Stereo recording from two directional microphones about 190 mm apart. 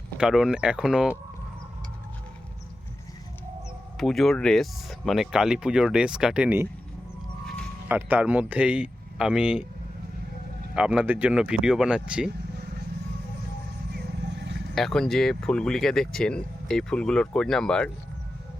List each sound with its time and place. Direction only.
0.2 s speech: 5° right (ahead or behind)
3.9 s speech: centre (ahead or behind)
7.9 s speech: 10° right (ahead or behind)
10.8 s speech: 5° right (ahead or behind)
13.9 s wild animals: 65° right (ahead or behind)
14.8 s speech: centre (ahead or behind)